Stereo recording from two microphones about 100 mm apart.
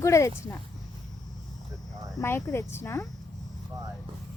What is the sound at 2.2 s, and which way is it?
Speech, 30° left (ahead or behind).